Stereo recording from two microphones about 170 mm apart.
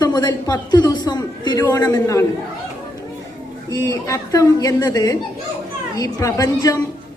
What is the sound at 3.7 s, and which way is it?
A man's voice, 20° left (ahead or behind).